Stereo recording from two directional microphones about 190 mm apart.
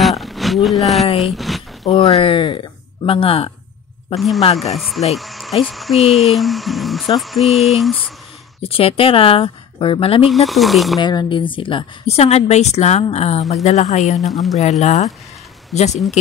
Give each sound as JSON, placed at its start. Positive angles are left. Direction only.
{"t": 0.2, "sound": "a sound", "side_deg": 0}
{"t": 1.9, "sound": "speech", "side_deg": 35}
{"t": 4.6, "sound": "speech", "side_deg": 0}
{"t": 8.6, "sound": "speech", "side_deg": 30}
{"t": 10.3, "sound": "speech", "side_deg": 0}
{"t": 11.0, "sound": "a woman's voice", "side_deg": 20}
{"t": 14.2, "sound": "speech", "side_deg": 0}
{"t": 14.6, "sound": "a woman's voice", "side_deg": 35}